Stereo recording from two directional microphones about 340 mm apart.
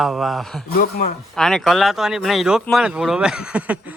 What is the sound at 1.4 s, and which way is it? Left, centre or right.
Speech, centre.